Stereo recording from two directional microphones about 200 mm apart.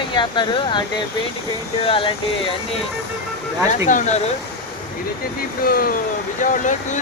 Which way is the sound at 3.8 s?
35° left (ahead or behind).